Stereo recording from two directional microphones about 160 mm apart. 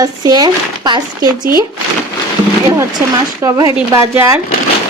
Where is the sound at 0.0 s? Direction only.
25° right (ahead or behind).